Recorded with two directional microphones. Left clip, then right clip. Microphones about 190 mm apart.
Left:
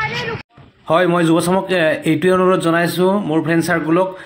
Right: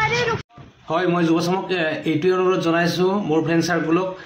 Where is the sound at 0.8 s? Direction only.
40° left (ahead or behind).